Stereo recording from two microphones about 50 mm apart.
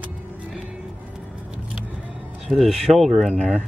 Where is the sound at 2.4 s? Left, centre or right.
Centre.